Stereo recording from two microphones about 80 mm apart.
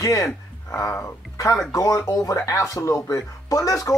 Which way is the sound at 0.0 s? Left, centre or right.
Left.